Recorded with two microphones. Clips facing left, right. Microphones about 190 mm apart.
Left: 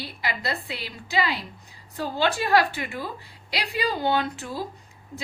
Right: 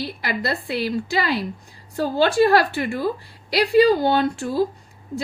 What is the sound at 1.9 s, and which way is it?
A woman's voice, 45° right (ahead or behind).